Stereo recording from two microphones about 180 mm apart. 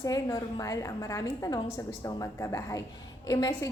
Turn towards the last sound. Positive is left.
turn(degrees=20)  # may be behind; listen again after turning